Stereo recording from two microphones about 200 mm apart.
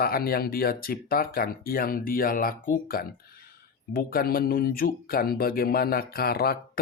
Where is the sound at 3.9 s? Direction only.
45° left (ahead or behind).